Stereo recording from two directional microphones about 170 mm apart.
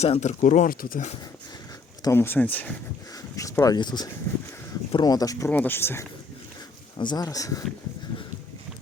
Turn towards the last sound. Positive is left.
turn(degrees=20)  # may be behind; listen again after turning